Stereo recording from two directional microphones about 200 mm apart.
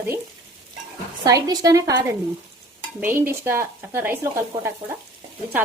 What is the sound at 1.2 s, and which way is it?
Speech, 20° right (ahead or behind).